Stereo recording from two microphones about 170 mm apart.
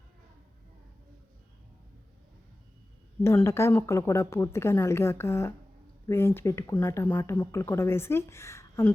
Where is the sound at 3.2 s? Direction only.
15° left (ahead or behind).